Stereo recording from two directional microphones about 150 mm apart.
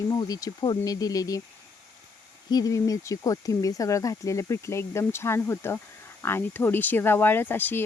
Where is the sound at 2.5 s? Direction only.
25° left (ahead or behind).